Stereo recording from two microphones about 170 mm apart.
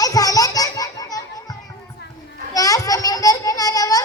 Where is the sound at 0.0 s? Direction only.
20° left (ahead or behind).